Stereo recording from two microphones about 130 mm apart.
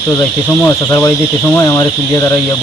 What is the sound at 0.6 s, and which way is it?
Speech, 20° left (ahead or behind).